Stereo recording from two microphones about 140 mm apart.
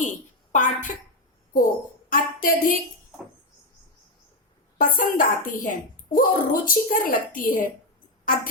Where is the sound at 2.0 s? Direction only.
85° left.